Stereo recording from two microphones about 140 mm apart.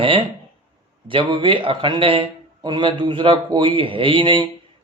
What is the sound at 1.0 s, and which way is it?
A man's voice, 40° right (ahead or behind).